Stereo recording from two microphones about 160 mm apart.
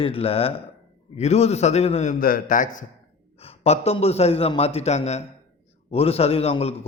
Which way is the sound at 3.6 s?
40° left (ahead or behind).